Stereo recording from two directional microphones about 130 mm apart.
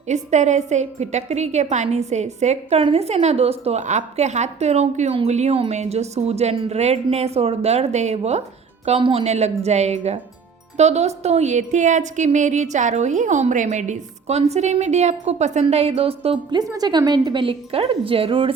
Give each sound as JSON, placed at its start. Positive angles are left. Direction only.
{"t": 0.1, "sound": "a woman's voice", "side_deg": -65}
{"t": 8.9, "sound": "a woman's voice", "side_deg": -45}
{"t": 15.6, "sound": "speech", "side_deg": -50}
{"t": 16.6, "sound": "speech", "side_deg": -30}